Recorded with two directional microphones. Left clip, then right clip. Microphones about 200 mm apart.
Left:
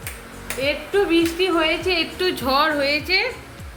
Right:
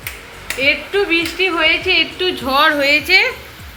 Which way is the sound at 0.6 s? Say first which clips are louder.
Right 5 dB; 5° left (ahead or behind).